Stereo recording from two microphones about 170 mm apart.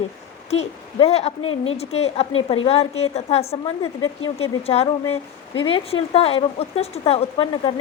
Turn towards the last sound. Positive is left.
turn(degrees=35)  # may be behind; listen again after turning